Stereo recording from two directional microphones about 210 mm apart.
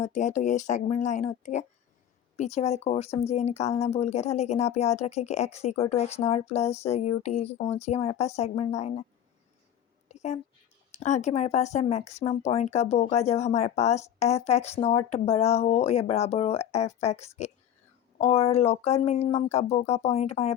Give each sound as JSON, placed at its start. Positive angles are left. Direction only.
{"t": 0.0, "sound": "speech", "side_deg": 35}
{"t": 10.1, "sound": "a sound", "side_deg": 35}
{"t": 10.9, "sound": "speech", "side_deg": 35}